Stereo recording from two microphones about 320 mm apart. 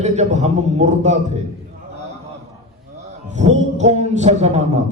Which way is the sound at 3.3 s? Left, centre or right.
Right.